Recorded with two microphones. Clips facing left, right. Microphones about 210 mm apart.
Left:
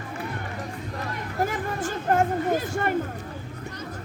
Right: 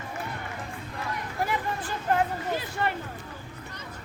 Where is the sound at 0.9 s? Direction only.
45° left (ahead or behind).